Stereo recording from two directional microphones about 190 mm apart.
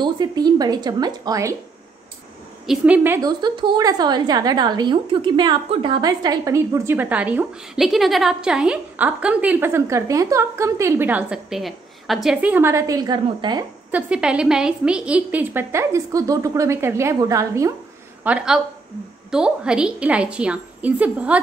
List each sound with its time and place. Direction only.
0.0 s speech: 20° right (ahead or behind)
2.6 s a woman's voice: 5° right (ahead or behind); by 13.7 s 20° right (ahead or behind)
13.9 s a woman's voice: 5° right (ahead or behind)
18.2 s a woman's voice: 5° right (ahead or behind)